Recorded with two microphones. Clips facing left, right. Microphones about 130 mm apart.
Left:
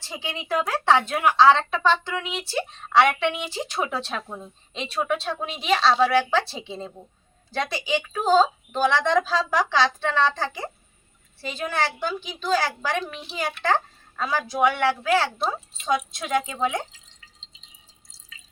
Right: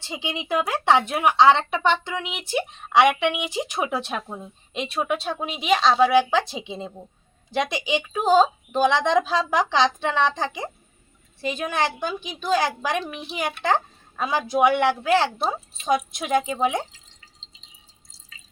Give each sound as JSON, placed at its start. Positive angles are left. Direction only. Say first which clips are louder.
{"t": 0.0, "sound": "a woman's voice", "louder": "right 3 dB", "side_deg": -20}